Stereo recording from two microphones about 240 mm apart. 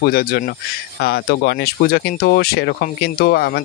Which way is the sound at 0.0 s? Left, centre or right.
Left.